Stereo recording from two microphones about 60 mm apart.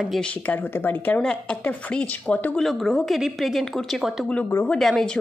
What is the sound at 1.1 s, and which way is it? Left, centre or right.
Speech, left.